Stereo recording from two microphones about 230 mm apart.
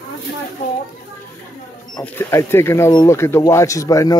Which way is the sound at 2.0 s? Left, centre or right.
Centre.